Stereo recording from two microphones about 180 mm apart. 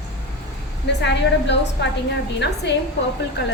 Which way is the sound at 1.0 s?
75° left (ahead or behind).